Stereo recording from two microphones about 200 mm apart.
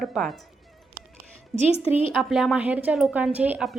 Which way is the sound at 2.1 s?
Centre (ahead or behind).